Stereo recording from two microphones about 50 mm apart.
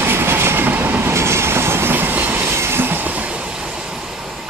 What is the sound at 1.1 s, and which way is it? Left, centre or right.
Train, right.